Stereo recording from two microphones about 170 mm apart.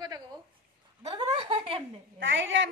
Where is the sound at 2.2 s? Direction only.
90° right.